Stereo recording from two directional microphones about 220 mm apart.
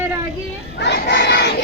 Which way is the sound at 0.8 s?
50° left (ahead or behind).